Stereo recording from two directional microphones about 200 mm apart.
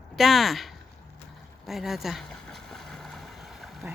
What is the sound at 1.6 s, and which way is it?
Boat, centre (ahead or behind).